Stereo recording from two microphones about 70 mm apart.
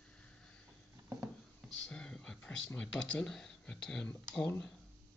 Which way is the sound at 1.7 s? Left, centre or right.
Centre.